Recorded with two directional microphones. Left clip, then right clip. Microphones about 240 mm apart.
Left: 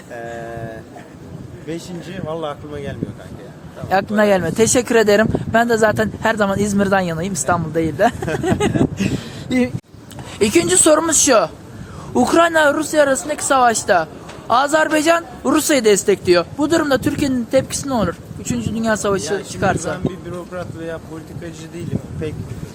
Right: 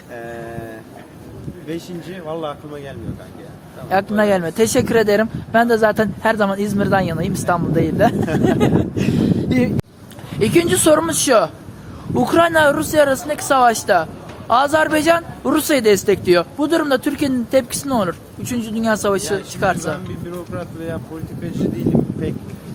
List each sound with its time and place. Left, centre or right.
0.1 s a sound: centre
1.6 s speech: centre
3.8 s speech: centre
12.4 s speech: centre
19.9 s speech: centre